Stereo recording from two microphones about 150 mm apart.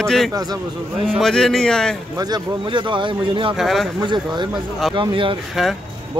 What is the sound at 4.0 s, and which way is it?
Speech, 30° right (ahead or behind).